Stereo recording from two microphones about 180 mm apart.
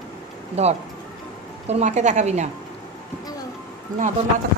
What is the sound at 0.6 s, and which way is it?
A woman's voice, 35° right (ahead or behind).